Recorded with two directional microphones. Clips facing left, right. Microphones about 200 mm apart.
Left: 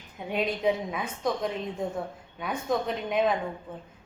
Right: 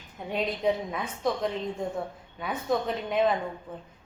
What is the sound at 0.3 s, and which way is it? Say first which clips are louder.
A woman's voice: left 1 dB; centre (ahead or behind).